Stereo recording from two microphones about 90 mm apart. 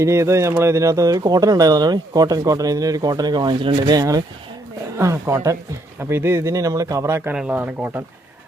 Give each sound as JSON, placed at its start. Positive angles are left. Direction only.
{"t": 0.0, "sound": "speech", "side_deg": -35}
{"t": 4.9, "sound": "speech", "side_deg": -35}
{"t": 7.3, "sound": "speech", "side_deg": -15}